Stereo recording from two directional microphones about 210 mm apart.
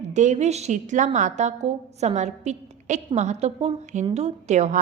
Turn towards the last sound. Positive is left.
turn(degrees=-35)  # may be behind; listen again after turning